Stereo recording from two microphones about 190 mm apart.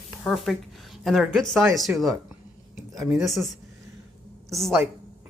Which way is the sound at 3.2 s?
Centre (ahead or behind).